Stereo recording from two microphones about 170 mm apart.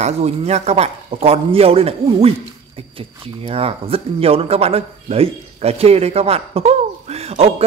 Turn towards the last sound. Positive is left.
turn(degrees=-35)  # may be behind; listen again after turning